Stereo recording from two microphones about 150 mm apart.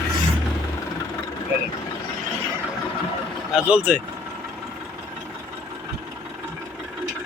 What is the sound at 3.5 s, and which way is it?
Speech, 10° right (ahead or behind).